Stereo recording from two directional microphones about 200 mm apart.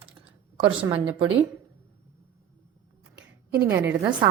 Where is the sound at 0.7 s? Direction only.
25° right (ahead or behind).